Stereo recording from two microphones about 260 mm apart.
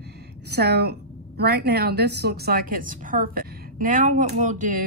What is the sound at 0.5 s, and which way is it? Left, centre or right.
A woman's voice, right.